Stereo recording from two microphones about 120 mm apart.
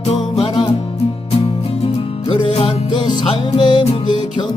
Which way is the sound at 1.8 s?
50° left (ahead or behind).